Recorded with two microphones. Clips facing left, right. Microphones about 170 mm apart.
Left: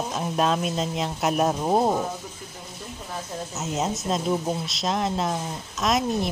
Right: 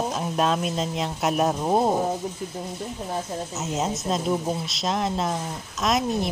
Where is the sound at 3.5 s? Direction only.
Centre (ahead or behind).